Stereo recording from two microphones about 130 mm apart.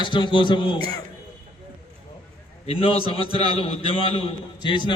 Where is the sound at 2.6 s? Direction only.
45° left (ahead or behind).